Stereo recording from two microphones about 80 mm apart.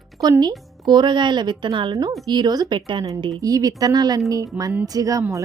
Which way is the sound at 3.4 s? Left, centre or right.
Right.